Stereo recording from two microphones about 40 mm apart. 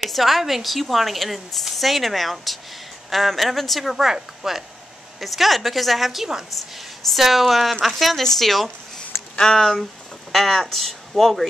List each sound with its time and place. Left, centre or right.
0.1 s a woman's voice: centre
3.9 s a woman's voice: centre
9.4 s a woman's voice: centre